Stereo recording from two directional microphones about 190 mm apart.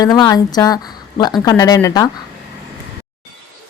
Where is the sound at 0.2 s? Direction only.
20° left (ahead or behind).